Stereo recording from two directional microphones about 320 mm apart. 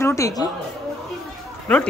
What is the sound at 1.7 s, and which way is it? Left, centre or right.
Speech, centre.